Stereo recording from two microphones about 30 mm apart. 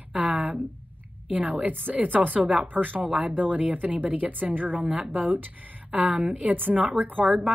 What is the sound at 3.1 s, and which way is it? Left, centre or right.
Speech, right.